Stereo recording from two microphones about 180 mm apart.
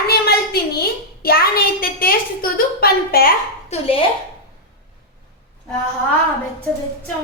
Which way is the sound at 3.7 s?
30° left (ahead or behind).